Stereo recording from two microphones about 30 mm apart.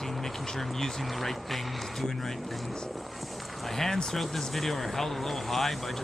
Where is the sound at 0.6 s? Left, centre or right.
Centre.